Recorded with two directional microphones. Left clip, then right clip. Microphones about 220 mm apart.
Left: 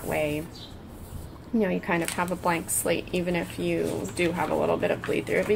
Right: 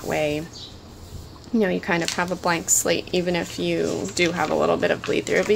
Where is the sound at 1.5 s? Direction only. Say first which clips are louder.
Right 4 dB; 20° right (ahead or behind).